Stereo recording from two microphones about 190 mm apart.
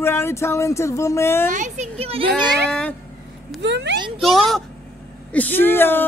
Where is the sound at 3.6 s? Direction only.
65° right (ahead or behind).